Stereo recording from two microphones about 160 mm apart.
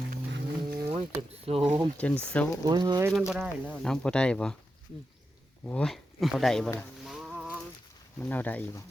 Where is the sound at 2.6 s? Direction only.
25° right (ahead or behind).